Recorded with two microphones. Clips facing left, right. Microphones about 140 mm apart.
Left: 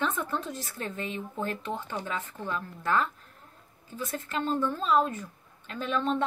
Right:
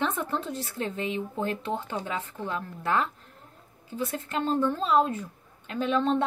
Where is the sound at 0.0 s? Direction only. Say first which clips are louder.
Right 2 dB; 20° right (ahead or behind).